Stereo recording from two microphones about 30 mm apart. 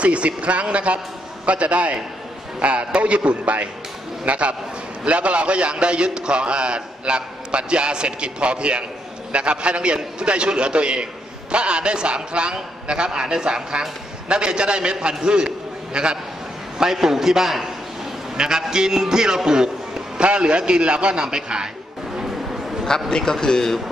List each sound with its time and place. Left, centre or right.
0.0 s a man's voice: right
16.7 s a man's voice: centre
18.7 s speech: right
20.2 s a man's voice: right
22.8 s a man's voice: centre